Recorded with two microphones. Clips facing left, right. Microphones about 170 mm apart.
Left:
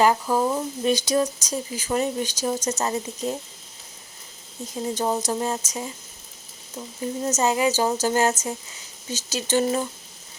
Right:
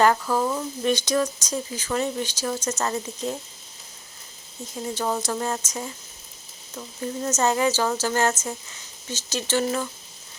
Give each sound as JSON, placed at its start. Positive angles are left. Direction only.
{"t": 0.0, "sound": "speech", "side_deg": 15}
{"t": 4.9, "sound": "speech", "side_deg": 20}